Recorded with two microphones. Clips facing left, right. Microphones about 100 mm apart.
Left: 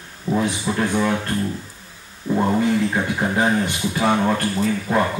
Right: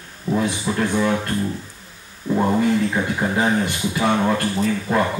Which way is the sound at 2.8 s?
15° left (ahead or behind).